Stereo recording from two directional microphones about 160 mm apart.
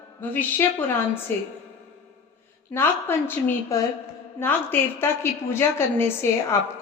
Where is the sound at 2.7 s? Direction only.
15° left (ahead or behind).